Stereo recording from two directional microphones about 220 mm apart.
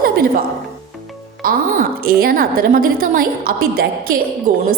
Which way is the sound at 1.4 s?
40° right (ahead or behind).